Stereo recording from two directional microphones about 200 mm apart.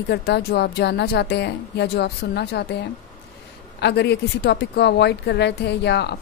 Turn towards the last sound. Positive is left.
turn(degrees=55)  # may be behind; listen again after turning